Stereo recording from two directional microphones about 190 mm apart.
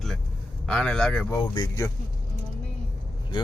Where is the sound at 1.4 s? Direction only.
20° left (ahead or behind).